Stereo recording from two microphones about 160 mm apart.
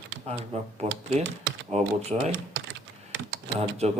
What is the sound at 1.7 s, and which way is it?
Speech, 45° right (ahead or behind).